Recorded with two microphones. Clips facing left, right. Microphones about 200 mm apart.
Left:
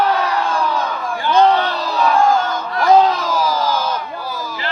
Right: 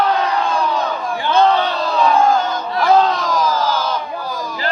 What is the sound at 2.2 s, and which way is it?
Crowd, 10° right (ahead or behind).